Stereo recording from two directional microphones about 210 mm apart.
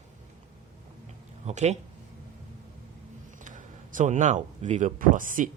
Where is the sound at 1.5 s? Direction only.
35° right (ahead or behind).